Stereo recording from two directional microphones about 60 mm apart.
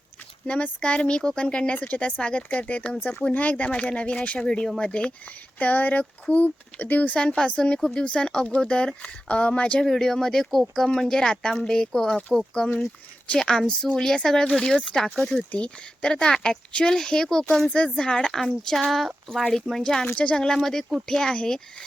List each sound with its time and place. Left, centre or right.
0.4 s speech: left
5.5 s speech: left
7.2 s speech: centre
9.8 s speech: centre